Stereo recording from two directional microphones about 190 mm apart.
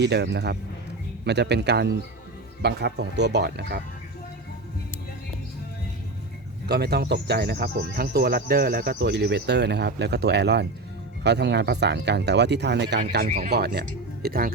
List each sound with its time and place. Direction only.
0.0 s speech: 65° right (ahead or behind)
6.7 s speech: 60° right (ahead or behind)